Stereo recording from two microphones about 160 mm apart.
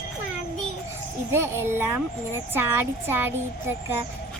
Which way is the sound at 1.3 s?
15° right (ahead or behind).